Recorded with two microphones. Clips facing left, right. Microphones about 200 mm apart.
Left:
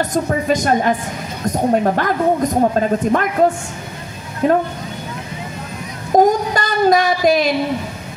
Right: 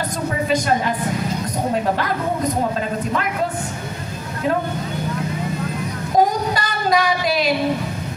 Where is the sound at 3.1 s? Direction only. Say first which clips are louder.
Left 7 dB; 45° left (ahead or behind).